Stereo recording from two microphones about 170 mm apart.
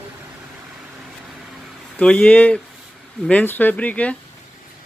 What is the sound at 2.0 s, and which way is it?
Speech, 5° left (ahead or behind).